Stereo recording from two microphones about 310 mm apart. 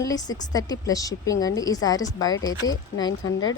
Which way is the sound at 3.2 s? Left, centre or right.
Left.